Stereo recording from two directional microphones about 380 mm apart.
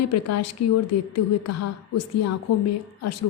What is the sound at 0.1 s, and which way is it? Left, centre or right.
A woman's voice, left.